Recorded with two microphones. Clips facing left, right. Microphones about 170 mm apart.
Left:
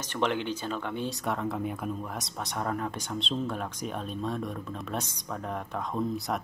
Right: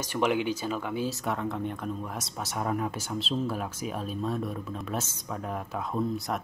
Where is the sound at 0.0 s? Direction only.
10° right (ahead or behind).